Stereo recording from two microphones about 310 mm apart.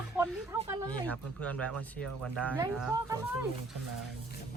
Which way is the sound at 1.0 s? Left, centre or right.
Centre.